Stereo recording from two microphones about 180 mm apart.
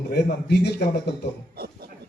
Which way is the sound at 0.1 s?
65° left (ahead or behind).